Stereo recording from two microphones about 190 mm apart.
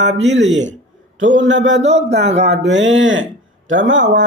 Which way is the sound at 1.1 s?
85° right.